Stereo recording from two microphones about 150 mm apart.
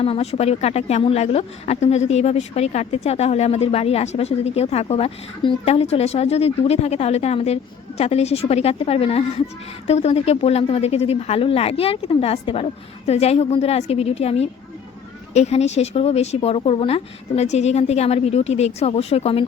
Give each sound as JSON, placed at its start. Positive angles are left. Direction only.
{"t": 0.0, "sound": "speech", "side_deg": 40}